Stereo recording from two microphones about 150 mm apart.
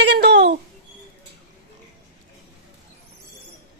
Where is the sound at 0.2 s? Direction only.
90° right.